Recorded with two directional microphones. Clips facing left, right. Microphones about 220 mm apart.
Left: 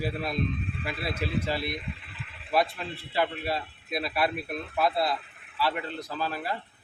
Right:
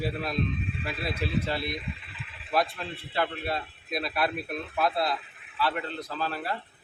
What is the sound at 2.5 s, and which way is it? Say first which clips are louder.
A man's voice: left 1 dB; 5° left (ahead or behind).